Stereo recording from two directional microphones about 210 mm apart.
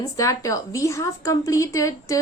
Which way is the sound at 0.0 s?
15° left (ahead or behind).